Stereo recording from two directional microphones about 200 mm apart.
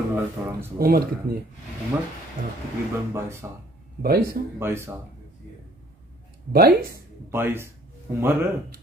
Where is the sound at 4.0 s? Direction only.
45° right (ahead or behind).